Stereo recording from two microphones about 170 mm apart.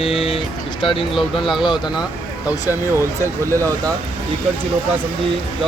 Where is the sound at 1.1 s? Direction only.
Centre (ahead or behind).